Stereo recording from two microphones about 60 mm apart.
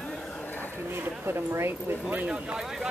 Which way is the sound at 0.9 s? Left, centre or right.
Right.